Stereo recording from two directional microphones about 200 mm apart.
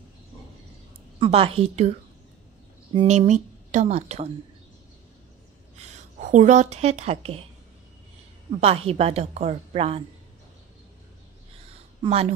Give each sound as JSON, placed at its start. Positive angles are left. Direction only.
{"t": 1.2, "sound": "a woman's voice", "side_deg": -30}
{"t": 2.9, "sound": "speech", "side_deg": -30}
{"t": 5.8, "sound": "a woman's voice", "side_deg": -35}
{"t": 8.5, "sound": "a woman's voice", "side_deg": -30}
{"t": 12.0, "sound": "speech", "side_deg": -30}